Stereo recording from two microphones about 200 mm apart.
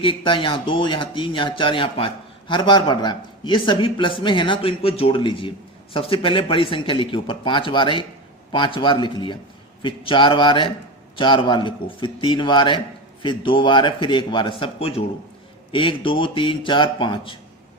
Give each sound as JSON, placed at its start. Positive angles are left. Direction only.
{"t": 0.0, "sound": "speech", "side_deg": 25}